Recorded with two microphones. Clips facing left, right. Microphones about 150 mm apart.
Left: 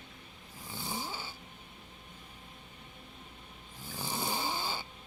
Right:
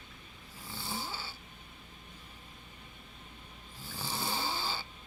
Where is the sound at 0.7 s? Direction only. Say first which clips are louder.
Left 1 dB; 15° left (ahead or behind).